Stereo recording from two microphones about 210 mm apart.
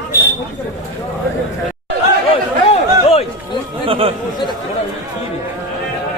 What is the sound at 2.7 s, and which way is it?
Chatter, 30° left (ahead or behind).